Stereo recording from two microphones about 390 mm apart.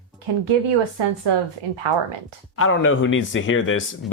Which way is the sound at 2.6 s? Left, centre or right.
Left.